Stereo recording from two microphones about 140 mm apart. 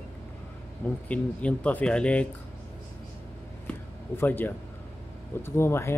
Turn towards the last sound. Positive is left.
turn(degrees=20)  # may be behind; listen again after turning